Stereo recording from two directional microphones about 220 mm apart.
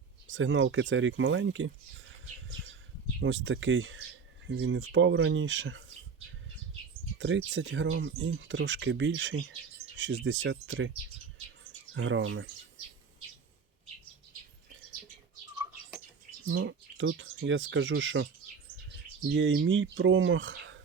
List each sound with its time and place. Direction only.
0.3 s speech: 60° right (ahead or behind)
2.5 s bird: 60° right (ahead or behind)
3.2 s speech: 60° right (ahead or behind)
7.2 s speech: 55° right (ahead or behind)
11.9 s speech: 65° right (ahead or behind)
16.6 s speech: 60° right (ahead or behind)
19.3 s speech: 55° right (ahead or behind)